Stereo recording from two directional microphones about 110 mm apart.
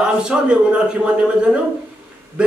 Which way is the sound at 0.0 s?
10° right (ahead or behind).